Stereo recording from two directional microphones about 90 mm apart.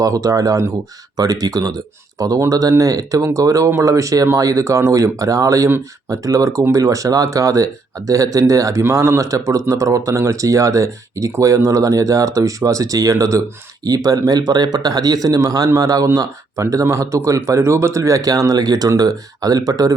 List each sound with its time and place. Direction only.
0.0 s speech: 40° right (ahead or behind)